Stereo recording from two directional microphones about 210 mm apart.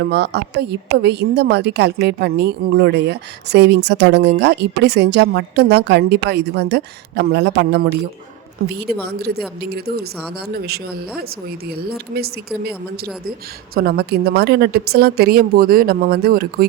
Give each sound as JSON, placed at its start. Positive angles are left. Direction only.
{"t": 0.0, "sound": "a woman's voice", "side_deg": -55}
{"t": 13.7, "sound": "a woman's voice", "side_deg": -50}